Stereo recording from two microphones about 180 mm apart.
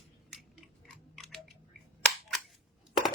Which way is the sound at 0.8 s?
5° left (ahead or behind).